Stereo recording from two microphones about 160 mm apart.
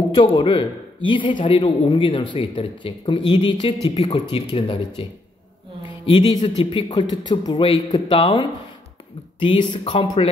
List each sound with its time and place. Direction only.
0.1 s a man's voice: 30° left (ahead or behind)
6.0 s a man's voice: 30° left (ahead or behind)